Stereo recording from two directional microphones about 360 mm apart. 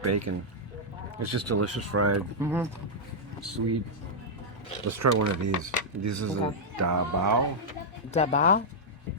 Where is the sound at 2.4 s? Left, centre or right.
Centre.